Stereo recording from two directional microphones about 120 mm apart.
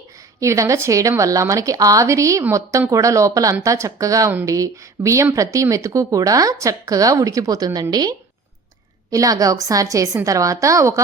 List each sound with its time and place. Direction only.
0.3 s speech: 25° right (ahead or behind)